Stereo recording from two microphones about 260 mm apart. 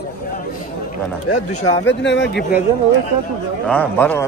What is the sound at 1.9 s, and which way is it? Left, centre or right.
Speech, left.